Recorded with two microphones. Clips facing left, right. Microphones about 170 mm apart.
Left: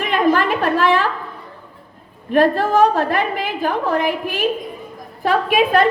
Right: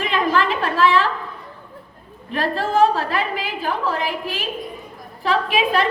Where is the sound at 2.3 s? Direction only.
50° left (ahead or behind).